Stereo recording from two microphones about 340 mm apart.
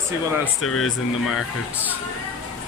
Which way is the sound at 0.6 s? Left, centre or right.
Left.